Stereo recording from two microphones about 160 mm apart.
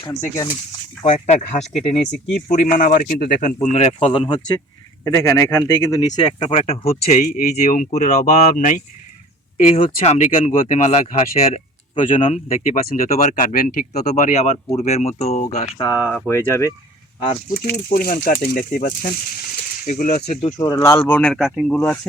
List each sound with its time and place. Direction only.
0.2 s speech: 20° left (ahead or behind)
1.0 s speech: 40° left (ahead or behind)
2.0 s speech: 5° left (ahead or behind)
2.5 s speech: 55° left (ahead or behind); by 4.5 s 35° left (ahead or behind)
5.0 s speech: 15° left (ahead or behind); by 8.2 s 45° left (ahead or behind)
8.2 s speech: 55° left (ahead or behind)
15.8 s speech: 20° left (ahead or behind)
17.5 s speech: 75° left (ahead or behind); by 20.5 s 45° left (ahead or behind)
20.7 s speech: 15° left (ahead or behind); by 21.7 s centre (ahead or behind)
21.7 s speech: 10° left (ahead or behind)